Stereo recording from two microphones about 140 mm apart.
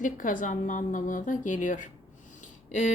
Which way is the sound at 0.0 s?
70° left (ahead or behind).